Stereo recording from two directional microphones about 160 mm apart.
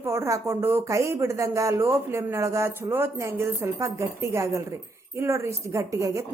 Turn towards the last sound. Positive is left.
turn(degrees=-20)  # may be behind; listen again after turning